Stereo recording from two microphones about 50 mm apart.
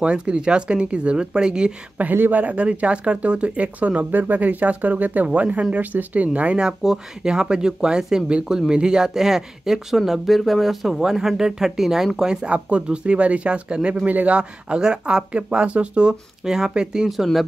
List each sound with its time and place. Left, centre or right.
0.0 s speech: right
2.1 s speech: right
4.1 s speech: right
6.8 s speech: centre
14.0 s speech: right
17.1 s speech: centre